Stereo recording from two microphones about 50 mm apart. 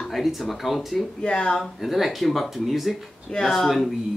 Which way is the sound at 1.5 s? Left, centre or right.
Centre.